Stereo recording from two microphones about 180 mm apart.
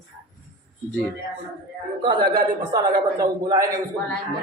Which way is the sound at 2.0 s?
25° right (ahead or behind).